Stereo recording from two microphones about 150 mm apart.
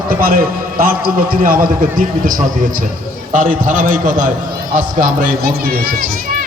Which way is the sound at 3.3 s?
60° right (ahead or behind).